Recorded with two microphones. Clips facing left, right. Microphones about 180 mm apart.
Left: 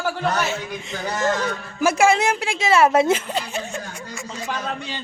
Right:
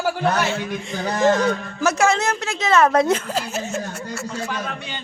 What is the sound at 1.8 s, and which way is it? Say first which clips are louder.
A woman's voice: left 3 dB; 10° left (ahead or behind).